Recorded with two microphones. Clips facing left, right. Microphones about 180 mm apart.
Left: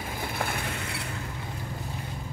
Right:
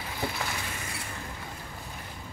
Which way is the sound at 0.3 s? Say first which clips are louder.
Left 4 dB; 55° left (ahead or behind).